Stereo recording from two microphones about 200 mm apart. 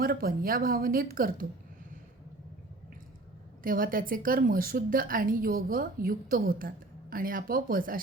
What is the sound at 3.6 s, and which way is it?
A woman's voice, 45° right (ahead or behind).